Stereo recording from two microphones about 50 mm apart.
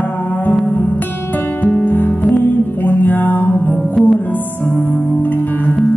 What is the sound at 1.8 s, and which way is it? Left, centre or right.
Music, left.